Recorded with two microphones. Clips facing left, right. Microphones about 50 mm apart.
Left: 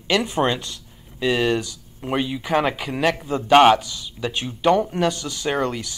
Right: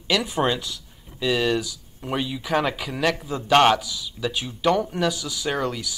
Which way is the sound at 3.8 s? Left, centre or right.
Left.